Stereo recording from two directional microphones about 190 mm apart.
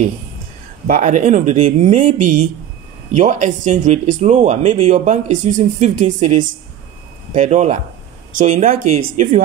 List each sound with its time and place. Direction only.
0.8 s speech: 45° right (ahead or behind)